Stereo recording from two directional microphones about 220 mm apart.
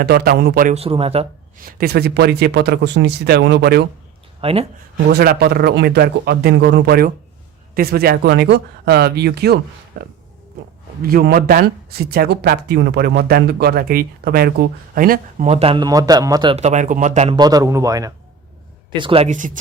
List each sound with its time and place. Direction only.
0.0 s speech: 45° right (ahead or behind)
0.7 s speech: 25° right (ahead or behind)
1.6 s speech: 45° right (ahead or behind)
4.4 s speech: 25° right (ahead or behind)
5.0 s speech: 45° right (ahead or behind)
17.3 s speech: 15° right (ahead or behind); by 19.5 s 35° right (ahead or behind)